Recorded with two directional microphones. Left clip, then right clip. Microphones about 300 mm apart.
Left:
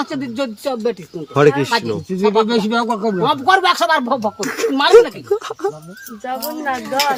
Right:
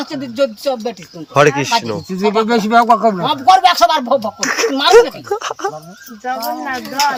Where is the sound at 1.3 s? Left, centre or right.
Centre.